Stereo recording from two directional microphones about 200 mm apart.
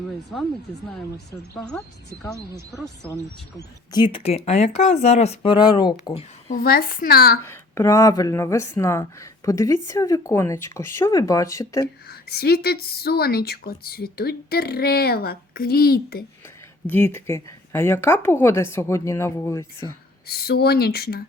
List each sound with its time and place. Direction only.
3.6 s speech: 20° left (ahead or behind)
6.5 s a woman's voice: 45° left (ahead or behind)
7.4 s speech: 10° left (ahead or behind)
12.0 s a woman's voice: 50° left (ahead or behind)
16.8 s speech: 10° left (ahead or behind)
20.2 s a woman's voice: 50° left (ahead or behind)